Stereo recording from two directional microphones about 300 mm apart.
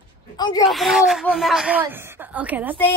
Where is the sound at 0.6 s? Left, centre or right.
Centre.